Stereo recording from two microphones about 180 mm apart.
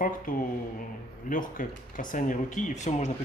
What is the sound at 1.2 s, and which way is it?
Speech, 50° left (ahead or behind).